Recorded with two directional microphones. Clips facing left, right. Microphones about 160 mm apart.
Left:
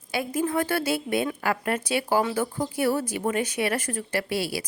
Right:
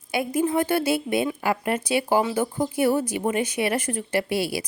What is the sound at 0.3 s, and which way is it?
A woman's voice, 20° right (ahead or behind).